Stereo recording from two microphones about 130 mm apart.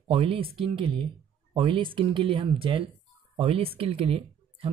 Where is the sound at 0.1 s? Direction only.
45° right (ahead or behind).